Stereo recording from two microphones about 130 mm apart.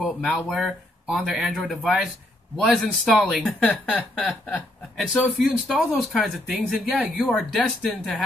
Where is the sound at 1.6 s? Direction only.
10° left (ahead or behind).